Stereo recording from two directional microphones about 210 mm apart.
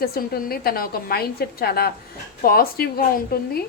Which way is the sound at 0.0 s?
45° left (ahead or behind).